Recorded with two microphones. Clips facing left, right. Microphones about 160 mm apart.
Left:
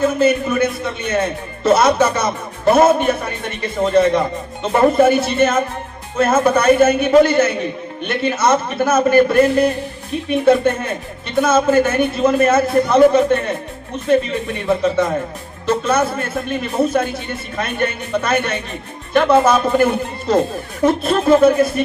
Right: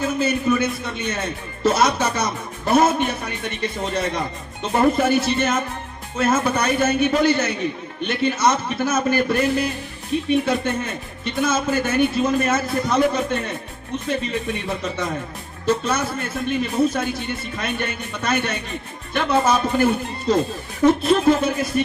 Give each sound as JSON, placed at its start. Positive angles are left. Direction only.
{"t": 0.1, "sound": "a man's voice", "side_deg": 55}
{"t": 14.7, "sound": "a man's voice", "side_deg": 55}